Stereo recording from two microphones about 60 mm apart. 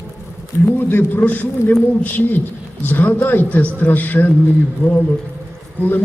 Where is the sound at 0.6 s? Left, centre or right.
Left.